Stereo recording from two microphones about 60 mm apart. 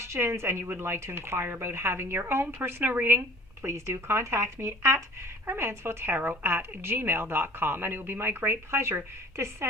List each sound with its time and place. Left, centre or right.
0.0 s a woman's voice: right